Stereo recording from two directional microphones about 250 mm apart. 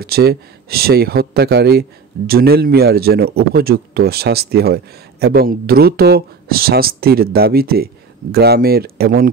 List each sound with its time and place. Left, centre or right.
0.0 s speech: right